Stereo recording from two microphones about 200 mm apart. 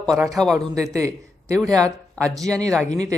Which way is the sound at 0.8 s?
15° right (ahead or behind).